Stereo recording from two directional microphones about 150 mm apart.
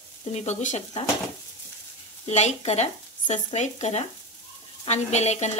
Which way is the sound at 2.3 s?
50° left (ahead or behind).